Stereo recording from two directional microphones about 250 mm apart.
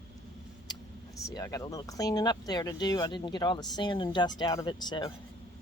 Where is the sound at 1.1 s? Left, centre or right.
Centre.